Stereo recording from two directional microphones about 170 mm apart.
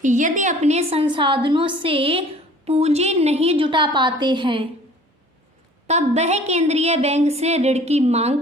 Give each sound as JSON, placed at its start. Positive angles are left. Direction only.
{"t": 0.0, "sound": "a woman's voice", "side_deg": -45}
{"t": 5.9, "sound": "a woman's voice", "side_deg": -40}